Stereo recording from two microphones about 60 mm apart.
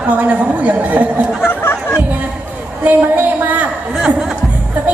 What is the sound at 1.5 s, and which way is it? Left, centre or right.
Speech, left.